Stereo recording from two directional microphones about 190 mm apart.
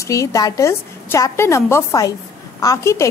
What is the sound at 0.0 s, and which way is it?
A woman's voice, 15° left (ahead or behind).